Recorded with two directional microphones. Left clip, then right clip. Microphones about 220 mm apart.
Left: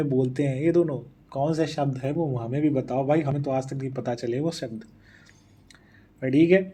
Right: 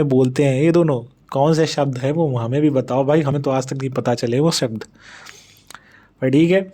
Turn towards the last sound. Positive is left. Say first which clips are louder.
# right 4 dB
turn(degrees=-45)  # may be behind; listen again after turning